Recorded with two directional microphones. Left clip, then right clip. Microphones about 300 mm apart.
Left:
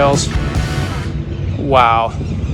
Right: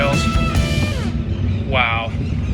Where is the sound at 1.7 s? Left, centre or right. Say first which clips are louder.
Left 8 dB; centre.